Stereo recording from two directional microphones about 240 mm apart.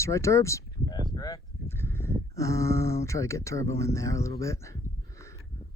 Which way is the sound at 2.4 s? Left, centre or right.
Centre.